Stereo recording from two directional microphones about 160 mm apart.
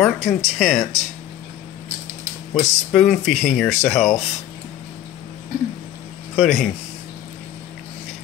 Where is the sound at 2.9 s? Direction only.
Centre (ahead or behind).